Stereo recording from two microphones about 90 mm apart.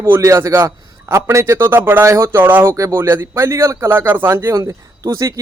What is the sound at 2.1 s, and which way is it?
A man's voice, 35° right (ahead or behind).